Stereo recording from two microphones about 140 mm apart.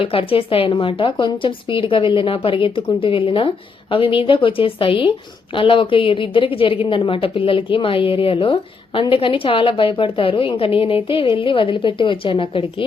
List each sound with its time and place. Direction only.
0.0 s speech: 40° left (ahead or behind)